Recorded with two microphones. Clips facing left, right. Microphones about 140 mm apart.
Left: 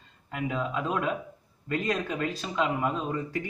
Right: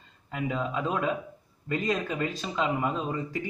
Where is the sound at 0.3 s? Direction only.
Centre (ahead or behind).